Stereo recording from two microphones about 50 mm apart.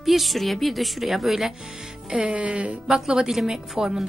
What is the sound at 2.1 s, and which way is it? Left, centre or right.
A woman's voice, right.